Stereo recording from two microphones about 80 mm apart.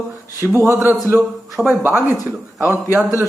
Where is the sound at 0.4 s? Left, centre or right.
Right.